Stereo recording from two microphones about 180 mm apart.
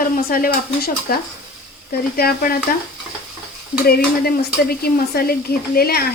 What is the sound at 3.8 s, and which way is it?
Stir, 55° left (ahead or behind).